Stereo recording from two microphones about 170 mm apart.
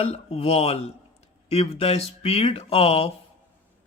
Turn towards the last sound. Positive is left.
turn(degrees=35)  # may be behind; listen again after turning